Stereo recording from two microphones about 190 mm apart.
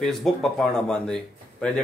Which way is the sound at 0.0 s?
Centre (ahead or behind).